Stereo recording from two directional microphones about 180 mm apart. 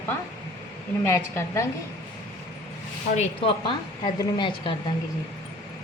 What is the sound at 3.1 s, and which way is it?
A woman's voice, 35° left (ahead or behind).